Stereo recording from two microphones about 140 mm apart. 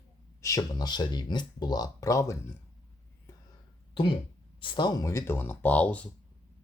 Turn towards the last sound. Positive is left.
turn(degrees=10)  # may be behind; listen again after turning